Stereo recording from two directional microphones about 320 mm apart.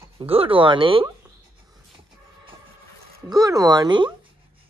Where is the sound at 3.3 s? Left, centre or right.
Centre.